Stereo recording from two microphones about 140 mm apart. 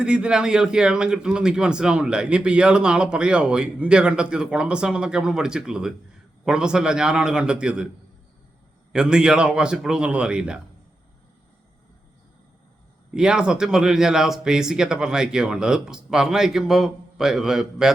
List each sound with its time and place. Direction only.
0.0 s a man's voice: 5° right (ahead or behind)
8.9 s a man's voice: 5° right (ahead or behind)
13.1 s speech: 5° right (ahead or behind)